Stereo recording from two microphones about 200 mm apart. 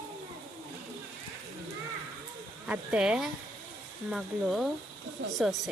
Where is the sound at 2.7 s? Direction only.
5° right (ahead or behind).